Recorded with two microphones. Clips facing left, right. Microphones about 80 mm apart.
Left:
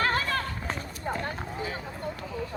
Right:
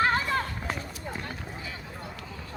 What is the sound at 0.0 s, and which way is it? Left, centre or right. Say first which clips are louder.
Run: right 2 dB; right.